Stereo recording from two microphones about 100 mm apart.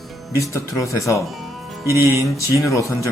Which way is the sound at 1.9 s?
30° right (ahead or behind).